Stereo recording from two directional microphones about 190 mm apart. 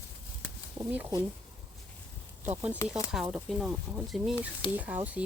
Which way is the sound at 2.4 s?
10° right (ahead or behind).